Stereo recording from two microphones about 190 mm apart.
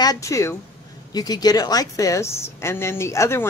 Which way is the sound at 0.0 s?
20° left (ahead or behind).